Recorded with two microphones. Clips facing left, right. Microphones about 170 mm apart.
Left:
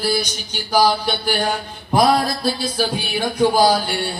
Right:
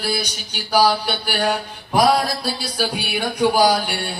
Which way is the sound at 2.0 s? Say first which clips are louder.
Left 1 dB; 10° right (ahead or behind).